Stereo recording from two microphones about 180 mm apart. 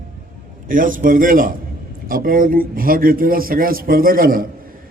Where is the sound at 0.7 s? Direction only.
50° right (ahead or behind).